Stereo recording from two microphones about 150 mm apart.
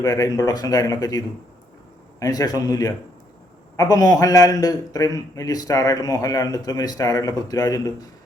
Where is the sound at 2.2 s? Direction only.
25° left (ahead or behind).